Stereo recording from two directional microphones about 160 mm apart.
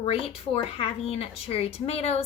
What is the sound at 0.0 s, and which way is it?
A woman's voice, 35° left (ahead or behind).